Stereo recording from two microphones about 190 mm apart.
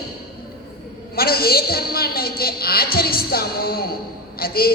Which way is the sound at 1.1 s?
55° left (ahead or behind).